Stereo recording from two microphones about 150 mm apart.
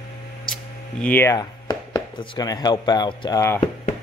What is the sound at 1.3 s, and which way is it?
Speech, 25° left (ahead or behind).